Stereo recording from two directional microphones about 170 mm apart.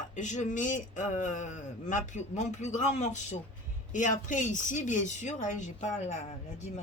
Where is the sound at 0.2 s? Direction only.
45° left (ahead or behind).